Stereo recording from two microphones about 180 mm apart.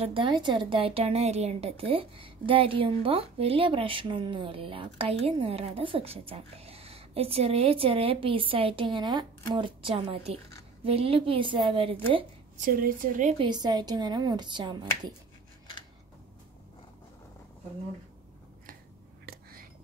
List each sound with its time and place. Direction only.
0.0 s a woman's voice: 30° right (ahead or behind)
12.5 s a woman's voice: 50° right (ahead or behind)
13.4 s speech: 25° right (ahead or behind)
19.2 s whispering: 55° right (ahead or behind)